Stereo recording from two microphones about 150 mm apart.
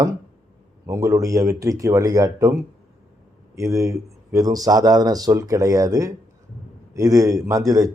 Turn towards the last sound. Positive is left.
turn(degrees=-20)  # may be behind; listen again after turning